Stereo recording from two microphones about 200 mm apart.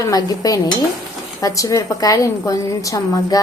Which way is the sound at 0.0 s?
20° left (ahead or behind).